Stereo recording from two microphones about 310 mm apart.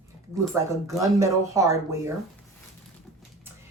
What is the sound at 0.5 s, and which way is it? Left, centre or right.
Speech, centre.